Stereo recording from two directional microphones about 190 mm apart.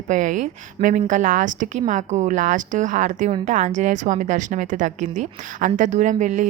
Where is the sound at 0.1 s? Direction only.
40° right (ahead or behind).